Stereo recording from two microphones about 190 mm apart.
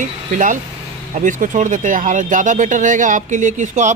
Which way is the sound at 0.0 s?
45° right (ahead or behind).